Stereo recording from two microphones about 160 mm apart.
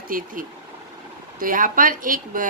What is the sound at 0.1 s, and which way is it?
Speech, 60° right (ahead or behind).